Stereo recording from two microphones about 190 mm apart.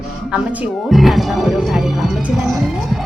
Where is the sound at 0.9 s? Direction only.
Centre (ahead or behind).